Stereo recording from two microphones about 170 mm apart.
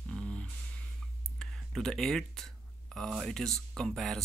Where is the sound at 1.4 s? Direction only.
Centre (ahead or behind).